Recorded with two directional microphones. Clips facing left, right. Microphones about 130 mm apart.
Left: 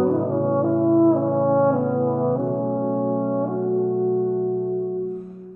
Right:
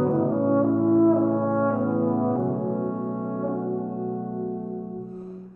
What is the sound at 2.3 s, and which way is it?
Brass instrument, 25° left (ahead or behind).